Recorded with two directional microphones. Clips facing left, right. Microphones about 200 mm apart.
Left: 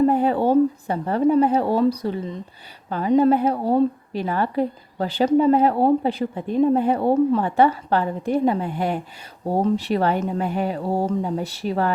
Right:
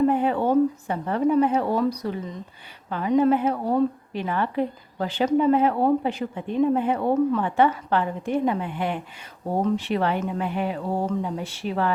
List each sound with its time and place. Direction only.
0.0 s a woman's voice: 35° left (ahead or behind)